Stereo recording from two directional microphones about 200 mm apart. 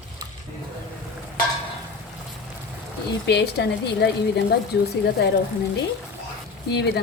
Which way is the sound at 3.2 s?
55° left (ahead or behind).